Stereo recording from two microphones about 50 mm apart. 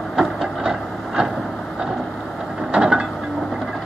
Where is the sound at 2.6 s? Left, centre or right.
Centre.